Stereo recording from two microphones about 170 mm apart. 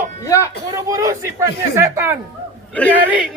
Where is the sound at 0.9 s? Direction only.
20° right (ahead or behind).